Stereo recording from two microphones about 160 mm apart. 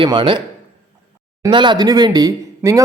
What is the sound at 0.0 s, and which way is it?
Speech, 30° right (ahead or behind).